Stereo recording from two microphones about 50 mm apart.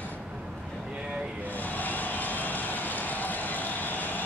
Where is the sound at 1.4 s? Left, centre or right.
Left.